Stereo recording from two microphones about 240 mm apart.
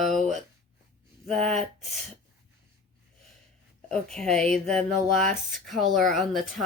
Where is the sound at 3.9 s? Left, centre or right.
Centre.